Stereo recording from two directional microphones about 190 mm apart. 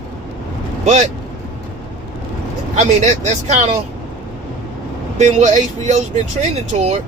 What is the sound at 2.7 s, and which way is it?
Speech, 40° right (ahead or behind).